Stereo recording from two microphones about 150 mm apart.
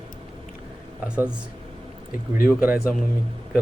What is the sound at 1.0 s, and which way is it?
Speech, 5° right (ahead or behind).